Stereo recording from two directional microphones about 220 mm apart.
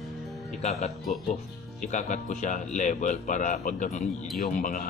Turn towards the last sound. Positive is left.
turn(degrees=35)  # may be behind; listen again after turning